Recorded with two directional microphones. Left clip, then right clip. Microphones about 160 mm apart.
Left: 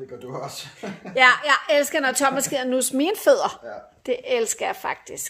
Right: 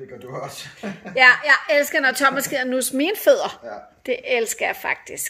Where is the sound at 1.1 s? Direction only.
10° left (ahead or behind).